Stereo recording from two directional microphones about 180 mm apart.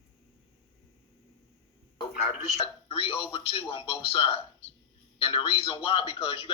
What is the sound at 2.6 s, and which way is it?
A man's voice, 30° left (ahead or behind).